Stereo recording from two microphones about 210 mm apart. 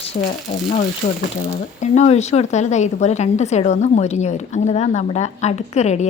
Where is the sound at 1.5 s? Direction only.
35° left (ahead or behind).